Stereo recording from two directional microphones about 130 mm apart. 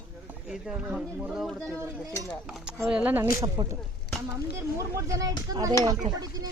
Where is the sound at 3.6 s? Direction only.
35° right (ahead or behind).